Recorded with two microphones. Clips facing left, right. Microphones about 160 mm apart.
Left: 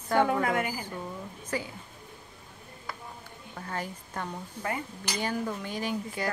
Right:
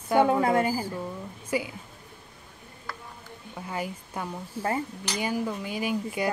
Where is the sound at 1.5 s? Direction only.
10° right (ahead or behind).